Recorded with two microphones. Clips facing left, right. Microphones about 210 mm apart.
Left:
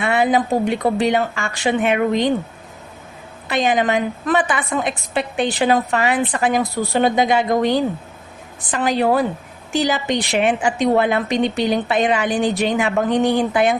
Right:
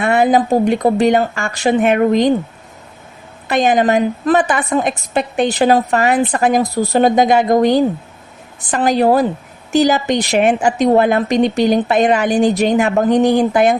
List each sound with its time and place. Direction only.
0.0 s a woman's voice: 45° right (ahead or behind)
3.4 s a woman's voice: 45° right (ahead or behind)